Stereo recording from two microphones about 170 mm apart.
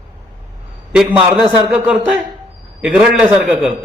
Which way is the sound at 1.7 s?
Centre (ahead or behind).